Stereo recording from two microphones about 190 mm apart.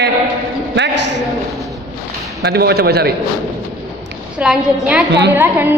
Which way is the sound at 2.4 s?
60° right (ahead or behind).